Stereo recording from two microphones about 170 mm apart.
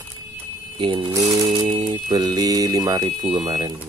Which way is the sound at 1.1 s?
20° right (ahead or behind).